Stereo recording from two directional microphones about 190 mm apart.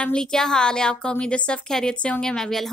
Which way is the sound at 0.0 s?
5° left (ahead or behind).